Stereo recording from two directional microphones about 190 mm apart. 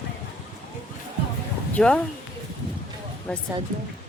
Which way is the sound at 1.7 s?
5° left (ahead or behind).